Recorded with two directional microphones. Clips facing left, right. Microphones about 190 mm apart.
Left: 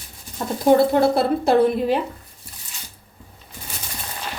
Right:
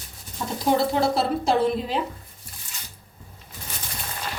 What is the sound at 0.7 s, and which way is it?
A woman's voice, 55° left (ahead or behind).